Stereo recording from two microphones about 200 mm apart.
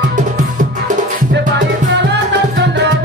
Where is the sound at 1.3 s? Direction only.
65° right (ahead or behind).